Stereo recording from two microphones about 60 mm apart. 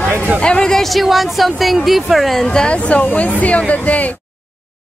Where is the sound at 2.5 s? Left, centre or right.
Centre.